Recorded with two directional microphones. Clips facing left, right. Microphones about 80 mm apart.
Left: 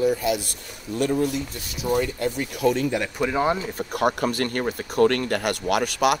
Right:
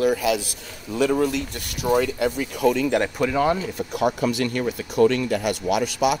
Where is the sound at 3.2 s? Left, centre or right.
Left.